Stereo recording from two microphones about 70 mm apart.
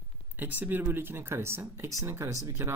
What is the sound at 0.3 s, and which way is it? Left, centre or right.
Speech, right.